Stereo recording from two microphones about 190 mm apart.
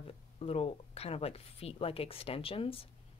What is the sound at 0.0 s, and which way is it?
Speech, 30° left (ahead or behind).